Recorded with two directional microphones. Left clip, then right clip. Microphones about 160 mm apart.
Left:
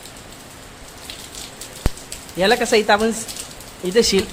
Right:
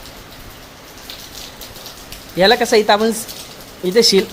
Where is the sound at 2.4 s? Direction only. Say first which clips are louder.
Right 4 dB; 10° right (ahead or behind).